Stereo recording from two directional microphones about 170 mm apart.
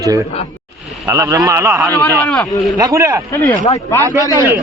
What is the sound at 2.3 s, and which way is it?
Speech, centre (ahead or behind).